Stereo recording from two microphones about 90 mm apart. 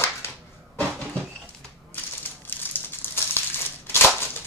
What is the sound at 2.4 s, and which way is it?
Crumpling, 20° left (ahead or behind).